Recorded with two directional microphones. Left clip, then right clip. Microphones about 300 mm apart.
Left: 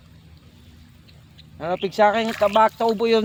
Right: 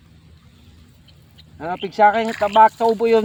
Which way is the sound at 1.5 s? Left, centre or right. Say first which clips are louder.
Right 2 dB; left.